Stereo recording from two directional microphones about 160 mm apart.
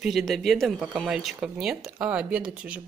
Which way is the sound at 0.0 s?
Centre (ahead or behind).